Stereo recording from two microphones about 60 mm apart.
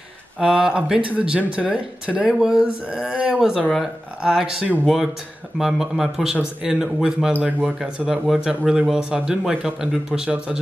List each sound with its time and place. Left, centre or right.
0.4 s speech: centre
7.4 s speech: right
8.0 s speech: centre